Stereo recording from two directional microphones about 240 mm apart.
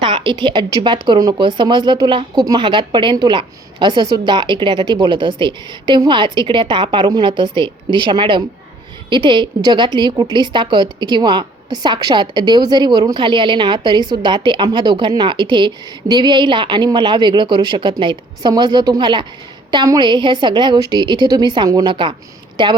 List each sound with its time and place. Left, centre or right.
0.0 s a woman's voice: right